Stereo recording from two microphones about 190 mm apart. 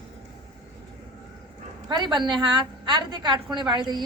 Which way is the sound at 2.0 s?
25° right (ahead or behind).